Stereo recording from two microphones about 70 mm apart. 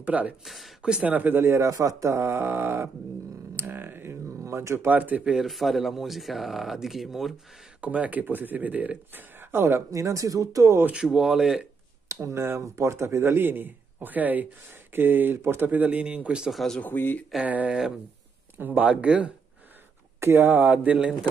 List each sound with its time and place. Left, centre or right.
0.0 s speech: right
1.7 s speech: right
3.5 s a sound: right
4.8 s speech: right
5.4 s speech: centre
7.8 s speech: centre; by 9.8 s right
9.8 s speech: right
11.1 s speech: centre
12.1 s speech: right; by 16.4 s centre
16.8 s speech: left
17.4 s speech: centre
20.2 s speech: right